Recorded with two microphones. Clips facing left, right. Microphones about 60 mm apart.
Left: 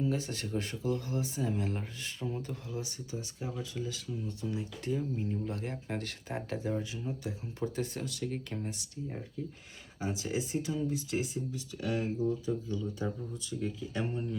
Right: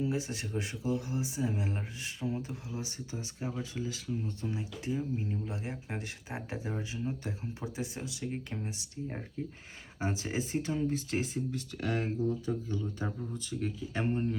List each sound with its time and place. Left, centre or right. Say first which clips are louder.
0.0 s speech: even; centre
4.6 s speech: left 1 dB; centre
7.6 s speech: left 5 dB; centre
10.0 s speech: even; right
12.5 s speech: even; right